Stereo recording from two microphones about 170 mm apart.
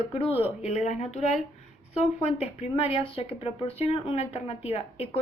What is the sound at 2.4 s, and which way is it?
Speech, 35° left (ahead or behind).